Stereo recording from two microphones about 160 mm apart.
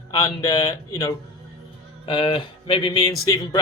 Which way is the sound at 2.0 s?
30° left (ahead or behind).